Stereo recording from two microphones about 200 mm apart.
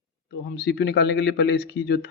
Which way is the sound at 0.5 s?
60° left (ahead or behind).